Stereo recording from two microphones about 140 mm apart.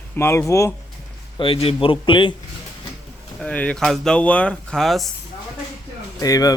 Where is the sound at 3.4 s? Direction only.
10° left (ahead or behind).